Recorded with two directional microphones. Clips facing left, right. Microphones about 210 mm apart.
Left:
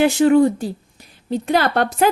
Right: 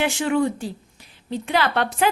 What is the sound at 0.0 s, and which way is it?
A woman's voice, 40° left (ahead or behind).